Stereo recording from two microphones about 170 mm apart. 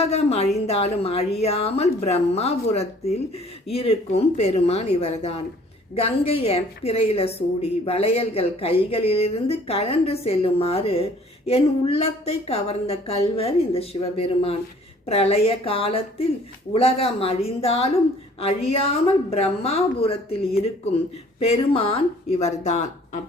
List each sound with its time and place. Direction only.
0.1 s a woman's voice: 40° left (ahead or behind)